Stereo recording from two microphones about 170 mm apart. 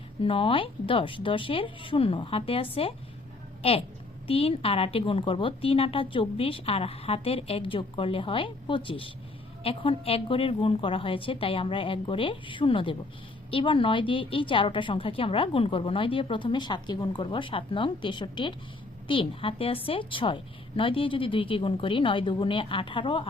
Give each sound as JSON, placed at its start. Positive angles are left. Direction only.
{"t": 0.2, "sound": "a woman's voice", "side_deg": 30}